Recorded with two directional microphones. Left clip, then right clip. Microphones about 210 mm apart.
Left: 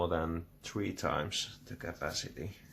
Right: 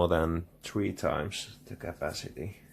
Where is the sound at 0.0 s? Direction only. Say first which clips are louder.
Right 6 dB; 45° right (ahead or behind); by 2.5 s 20° right (ahead or behind).